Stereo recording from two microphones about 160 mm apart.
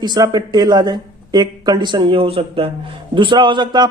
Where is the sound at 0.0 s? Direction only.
25° right (ahead or behind).